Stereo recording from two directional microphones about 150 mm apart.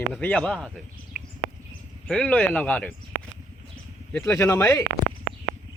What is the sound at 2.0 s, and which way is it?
Speech, 10° left (ahead or behind).